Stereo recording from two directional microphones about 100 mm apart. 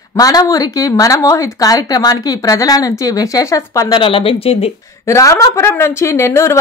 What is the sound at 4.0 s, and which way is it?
Speech, 65° left (ahead or behind).